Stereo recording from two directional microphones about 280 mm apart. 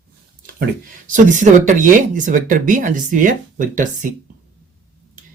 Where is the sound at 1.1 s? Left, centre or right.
Right.